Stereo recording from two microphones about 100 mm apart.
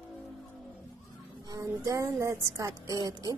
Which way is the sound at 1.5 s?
35° right (ahead or behind).